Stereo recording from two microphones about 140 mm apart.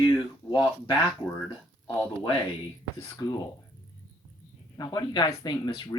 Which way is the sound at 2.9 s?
20° left (ahead or behind).